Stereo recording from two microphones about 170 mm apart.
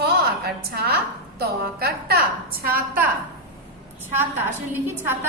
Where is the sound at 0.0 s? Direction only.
65° right (ahead or behind).